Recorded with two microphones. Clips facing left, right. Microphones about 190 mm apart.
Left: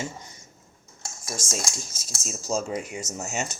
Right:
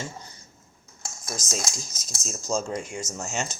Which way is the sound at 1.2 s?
5° left (ahead or behind).